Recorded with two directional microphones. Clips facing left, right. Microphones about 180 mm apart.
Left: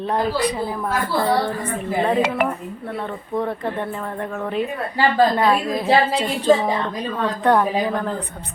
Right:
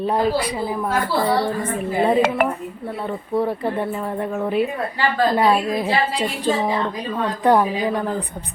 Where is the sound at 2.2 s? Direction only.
50° right (ahead or behind).